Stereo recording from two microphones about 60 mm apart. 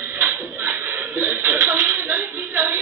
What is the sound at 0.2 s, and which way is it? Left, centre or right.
Chuckle, right.